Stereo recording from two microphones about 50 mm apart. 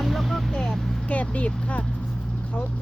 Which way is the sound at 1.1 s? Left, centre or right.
Left.